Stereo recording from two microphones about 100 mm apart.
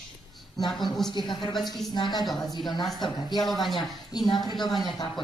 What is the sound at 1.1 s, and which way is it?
Speech, 50° left (ahead or behind).